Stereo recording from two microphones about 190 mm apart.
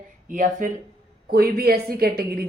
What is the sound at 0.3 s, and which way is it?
A woman's voice, 45° right (ahead or behind).